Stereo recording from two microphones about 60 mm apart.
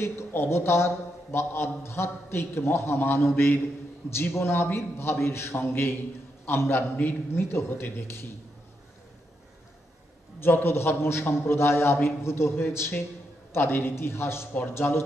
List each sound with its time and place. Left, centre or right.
0.0 s a man's voice: left
10.4 s a man's voice: left